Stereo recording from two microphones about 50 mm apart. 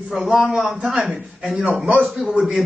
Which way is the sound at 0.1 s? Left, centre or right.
Centre.